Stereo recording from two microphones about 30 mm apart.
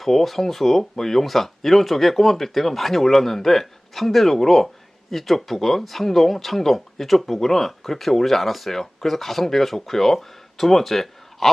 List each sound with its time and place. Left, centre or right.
0.0 s speech: centre